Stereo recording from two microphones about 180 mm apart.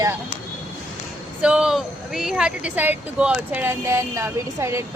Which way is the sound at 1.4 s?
5° right (ahead or behind).